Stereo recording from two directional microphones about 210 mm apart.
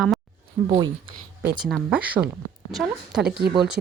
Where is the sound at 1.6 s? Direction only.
5° right (ahead or behind).